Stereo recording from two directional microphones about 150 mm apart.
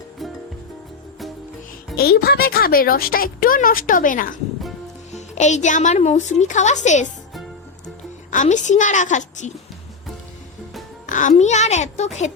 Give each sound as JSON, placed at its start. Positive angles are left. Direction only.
{"t": 0.2, "sound": "music", "side_deg": 0}
{"t": 2.0, "sound": "speech", "side_deg": 90}
{"t": 5.1, "sound": "speech", "side_deg": 50}
{"t": 8.3, "sound": "a woman's voice", "side_deg": 55}
{"t": 11.0, "sound": "speech", "side_deg": 55}